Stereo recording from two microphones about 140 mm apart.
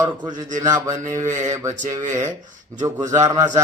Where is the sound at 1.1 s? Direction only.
60° right (ahead or behind).